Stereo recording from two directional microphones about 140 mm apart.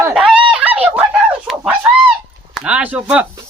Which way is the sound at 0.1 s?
5° right (ahead or behind).